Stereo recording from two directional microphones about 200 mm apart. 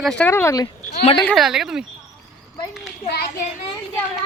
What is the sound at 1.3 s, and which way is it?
Speech, centre (ahead or behind).